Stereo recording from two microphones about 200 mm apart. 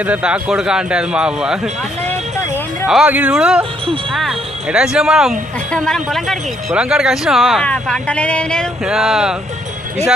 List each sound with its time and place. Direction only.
0.0 s speech: 5° right (ahead or behind)
2.8 s speech: 5° right (ahead or behind)